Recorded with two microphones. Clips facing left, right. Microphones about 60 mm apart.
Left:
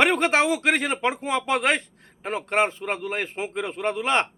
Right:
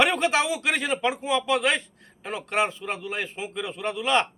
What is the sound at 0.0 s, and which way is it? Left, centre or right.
Speech, left.